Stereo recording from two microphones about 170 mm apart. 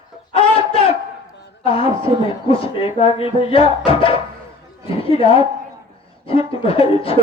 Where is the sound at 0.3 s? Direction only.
35° left (ahead or behind).